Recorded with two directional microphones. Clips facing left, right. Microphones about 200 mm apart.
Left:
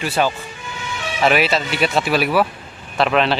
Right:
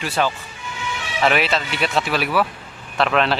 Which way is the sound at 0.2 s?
10° left (ahead or behind).